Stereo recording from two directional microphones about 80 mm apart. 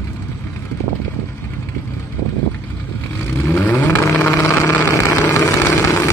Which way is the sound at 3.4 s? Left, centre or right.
Left.